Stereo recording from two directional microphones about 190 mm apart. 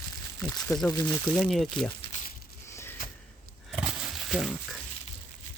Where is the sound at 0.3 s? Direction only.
15° left (ahead or behind).